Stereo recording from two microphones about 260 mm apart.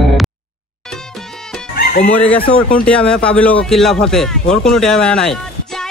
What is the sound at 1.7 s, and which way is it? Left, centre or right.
Music, left.